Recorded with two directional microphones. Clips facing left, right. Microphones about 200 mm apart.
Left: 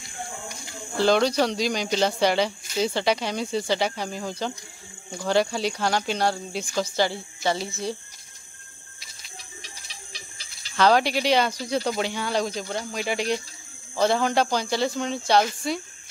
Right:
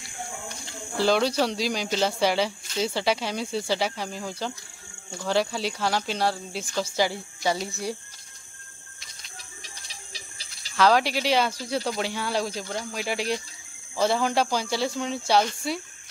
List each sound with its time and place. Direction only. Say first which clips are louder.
0.5 s cricket: even; 10° left (ahead or behind)
0.9 s speech: left 2 dB; 5° right (ahead or behind)
10.8 s speech: left 1 dB; centre (ahead or behind)